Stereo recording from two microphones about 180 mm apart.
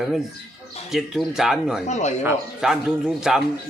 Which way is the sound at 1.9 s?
40° left (ahead or behind).